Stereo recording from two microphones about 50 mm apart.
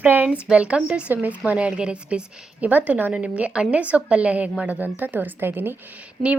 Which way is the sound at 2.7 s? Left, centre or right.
Right.